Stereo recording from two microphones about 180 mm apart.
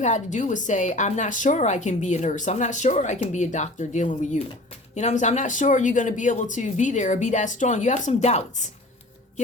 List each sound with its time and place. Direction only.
0.0 s speech: 40° left (ahead or behind)